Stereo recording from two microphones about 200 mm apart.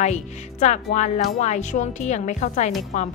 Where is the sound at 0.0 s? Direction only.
35° left (ahead or behind).